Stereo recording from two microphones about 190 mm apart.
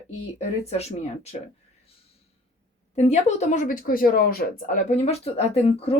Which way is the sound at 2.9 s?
35° left (ahead or behind).